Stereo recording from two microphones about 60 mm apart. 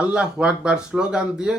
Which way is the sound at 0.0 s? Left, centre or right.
Centre.